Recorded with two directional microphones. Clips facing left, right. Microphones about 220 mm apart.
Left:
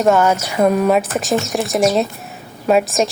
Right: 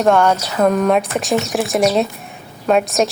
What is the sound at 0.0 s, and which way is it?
A woman's voice, 5° left (ahead or behind).